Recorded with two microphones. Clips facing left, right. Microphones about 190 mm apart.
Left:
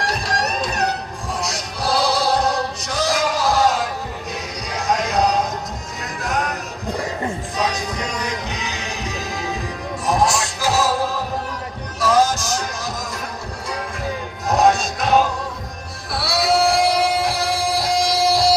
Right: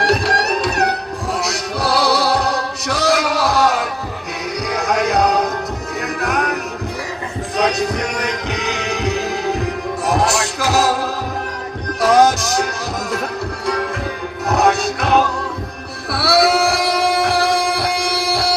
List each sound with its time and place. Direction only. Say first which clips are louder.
0.0 s music: right 6 dB; 70° right (ahead or behind)
11.9 s music: right 4 dB; 65° right (ahead or behind)
14.4 s music: right 1 dB; 65° right (ahead or behind)